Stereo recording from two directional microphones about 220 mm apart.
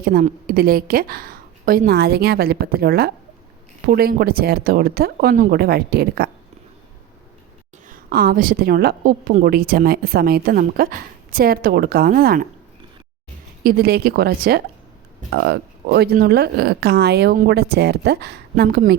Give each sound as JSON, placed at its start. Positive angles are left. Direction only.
{"t": 0.0, "sound": "a woman's voice", "side_deg": -40}
{"t": 7.9, "sound": "a woman's voice", "side_deg": -45}
{"t": 13.7, "sound": "a woman's voice", "side_deg": -45}